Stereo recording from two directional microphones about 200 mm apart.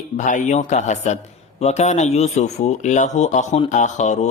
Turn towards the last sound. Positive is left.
turn(degrees=35)  # may be behind; listen again after turning